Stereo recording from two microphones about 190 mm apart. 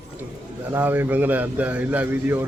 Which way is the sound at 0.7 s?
10° right (ahead or behind).